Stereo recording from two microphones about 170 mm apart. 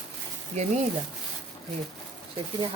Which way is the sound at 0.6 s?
40° right (ahead or behind).